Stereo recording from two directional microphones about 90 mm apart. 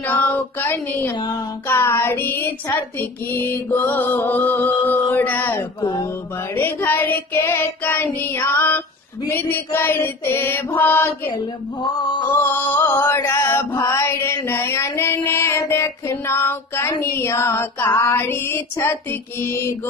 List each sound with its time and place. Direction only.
0.0 s music: 20° left (ahead or behind)
1.7 s mantra: 25° left (ahead or behind)
12.2 s mantra: 25° left (ahead or behind)
15.7 s child singing: 30° left (ahead or behind)
17.0 s mantra: 30° left (ahead or behind)